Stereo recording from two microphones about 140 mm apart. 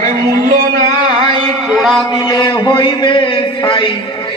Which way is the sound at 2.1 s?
30° left (ahead or behind).